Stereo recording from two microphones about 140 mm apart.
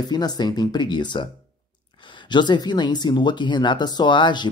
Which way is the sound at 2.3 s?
30° left (ahead or behind).